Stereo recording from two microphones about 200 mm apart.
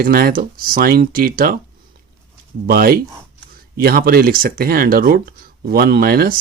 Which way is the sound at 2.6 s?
50° right (ahead or behind).